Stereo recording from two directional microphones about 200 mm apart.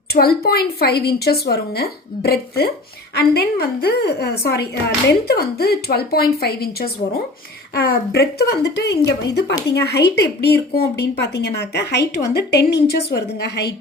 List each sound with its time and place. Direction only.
0.1 s a woman's voice: 50° left (ahead or behind)